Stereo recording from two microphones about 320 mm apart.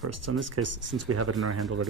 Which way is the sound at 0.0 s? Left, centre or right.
Right.